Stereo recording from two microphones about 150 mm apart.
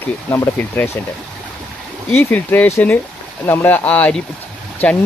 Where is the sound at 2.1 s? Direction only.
10° left (ahead or behind).